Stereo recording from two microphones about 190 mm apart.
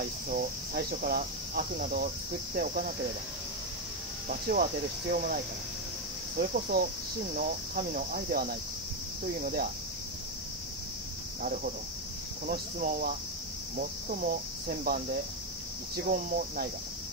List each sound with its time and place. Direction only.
0.3 s speech: 50° right (ahead or behind)
4.3 s speech: 50° right (ahead or behind)
11.4 s speech: 45° right (ahead or behind)
16.1 s speech: 45° right (ahead or behind)